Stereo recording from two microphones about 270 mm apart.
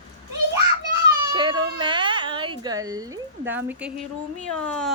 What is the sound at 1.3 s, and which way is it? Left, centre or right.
Speech, centre.